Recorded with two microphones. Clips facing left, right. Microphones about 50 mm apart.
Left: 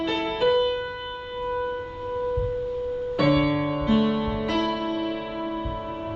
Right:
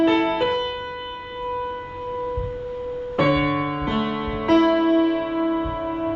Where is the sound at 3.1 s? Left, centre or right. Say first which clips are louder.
Right 2 dB; right.